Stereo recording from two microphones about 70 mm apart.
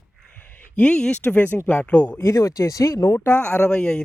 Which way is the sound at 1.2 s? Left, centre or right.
Left.